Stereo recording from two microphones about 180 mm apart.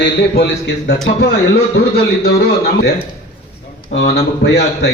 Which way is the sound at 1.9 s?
65° left (ahead or behind).